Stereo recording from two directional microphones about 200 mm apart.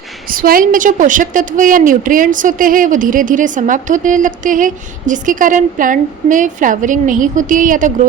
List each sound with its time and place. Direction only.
0.3 s a woman's voice: 45° right (ahead or behind)